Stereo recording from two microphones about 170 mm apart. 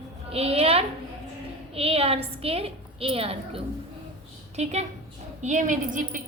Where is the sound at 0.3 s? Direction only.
35° right (ahead or behind).